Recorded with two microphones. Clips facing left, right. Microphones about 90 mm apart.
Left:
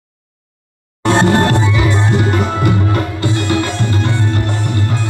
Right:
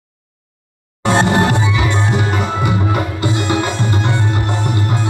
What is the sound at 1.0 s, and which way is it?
Music, 5° right (ahead or behind).